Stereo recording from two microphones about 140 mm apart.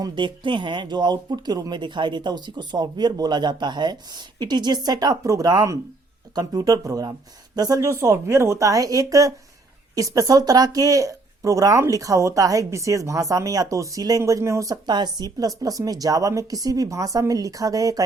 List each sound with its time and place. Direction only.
0.0 s speech: 35° right (ahead or behind)